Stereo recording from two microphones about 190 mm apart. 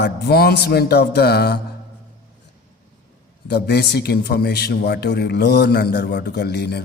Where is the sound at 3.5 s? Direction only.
60° left (ahead or behind).